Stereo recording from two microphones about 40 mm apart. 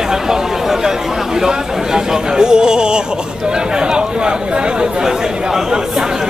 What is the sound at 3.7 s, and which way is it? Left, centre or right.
Chatter, right.